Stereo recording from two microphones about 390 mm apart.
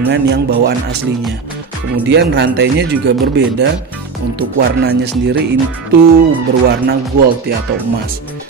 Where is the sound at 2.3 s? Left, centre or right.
Right.